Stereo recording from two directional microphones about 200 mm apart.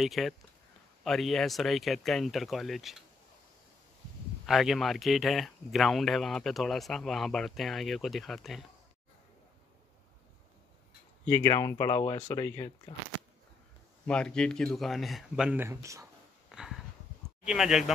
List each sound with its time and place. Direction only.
0.0 s speech: centre (ahead or behind)
4.5 s speech: centre (ahead or behind)
11.2 s speech: 15° left (ahead or behind)
14.0 s speech: 5° left (ahead or behind); by 16.1 s 15° right (ahead or behind)
16.4 s a sound: centre (ahead or behind)
17.5 s speech: centre (ahead or behind)